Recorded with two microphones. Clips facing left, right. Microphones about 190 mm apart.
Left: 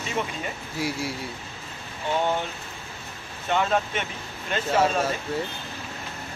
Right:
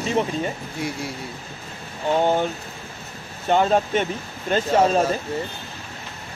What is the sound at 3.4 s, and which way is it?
Speech, 35° right (ahead or behind).